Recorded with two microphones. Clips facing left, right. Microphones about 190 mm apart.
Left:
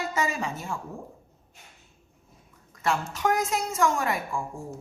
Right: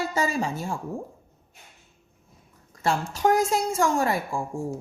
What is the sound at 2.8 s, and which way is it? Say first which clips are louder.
A woman's voice: right 3 dB; 30° right (ahead or behind).